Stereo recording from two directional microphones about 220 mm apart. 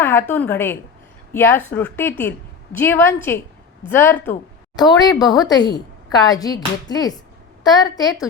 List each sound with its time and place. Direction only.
0.0 s a woman's voice: 10° left (ahead or behind)